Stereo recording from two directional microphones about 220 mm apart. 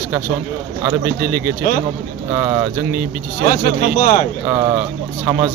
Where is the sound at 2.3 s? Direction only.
15° right (ahead or behind).